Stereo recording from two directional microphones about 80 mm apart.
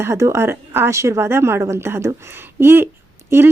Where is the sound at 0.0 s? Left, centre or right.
Right.